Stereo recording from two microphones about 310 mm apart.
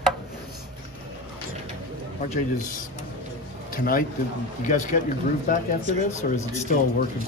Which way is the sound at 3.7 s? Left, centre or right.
Left.